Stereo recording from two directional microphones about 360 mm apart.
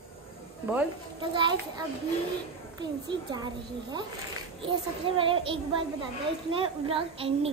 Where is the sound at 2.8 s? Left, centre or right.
Centre.